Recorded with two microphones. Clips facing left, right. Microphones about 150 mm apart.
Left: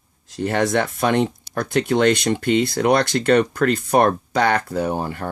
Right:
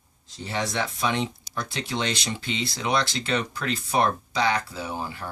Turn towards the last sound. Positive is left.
turn(degrees=55)  # may be behind; listen again after turning